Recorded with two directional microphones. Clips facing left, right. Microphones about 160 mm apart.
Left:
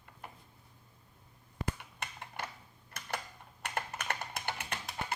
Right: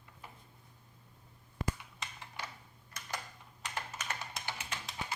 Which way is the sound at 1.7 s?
55° left (ahead or behind).